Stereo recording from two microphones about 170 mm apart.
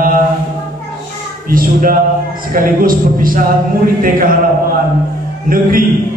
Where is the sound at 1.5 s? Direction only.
55° right (ahead or behind).